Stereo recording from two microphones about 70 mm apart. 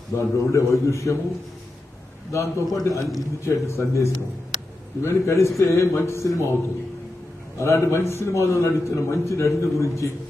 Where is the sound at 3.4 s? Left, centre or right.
Left.